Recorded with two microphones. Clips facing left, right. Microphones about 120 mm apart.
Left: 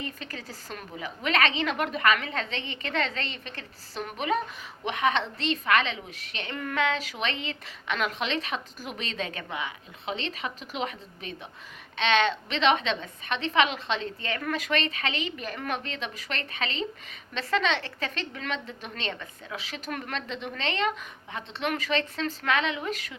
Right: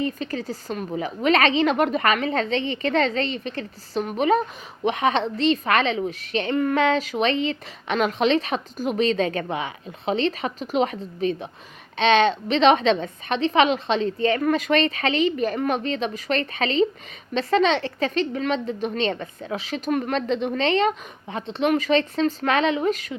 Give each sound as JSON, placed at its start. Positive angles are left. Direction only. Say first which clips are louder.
{"t": 0.0, "sound": "a woman's voice", "louder": "right 11 dB", "side_deg": -25}
{"t": 9.1, "sound": "a woman's voice", "louder": "right 10 dB", "side_deg": -40}
{"t": 20.2, "sound": "a woman's voice", "louder": "right 12 dB", "side_deg": -70}
{"t": 20.5, "sound": "a woman's voice", "louder": "right 6 dB", "side_deg": -25}
{"t": 22.4, "sound": "a woman's voice", "louder": "right 5 dB", "side_deg": -35}